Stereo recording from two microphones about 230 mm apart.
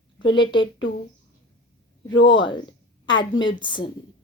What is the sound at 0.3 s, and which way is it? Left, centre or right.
Speech, left.